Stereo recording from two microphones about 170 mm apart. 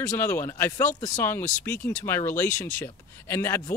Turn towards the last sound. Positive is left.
turn(degrees=15)  # may be behind; listen again after turning